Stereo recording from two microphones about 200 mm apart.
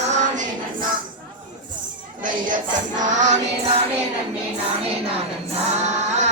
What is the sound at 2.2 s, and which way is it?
Music, 40° right (ahead or behind).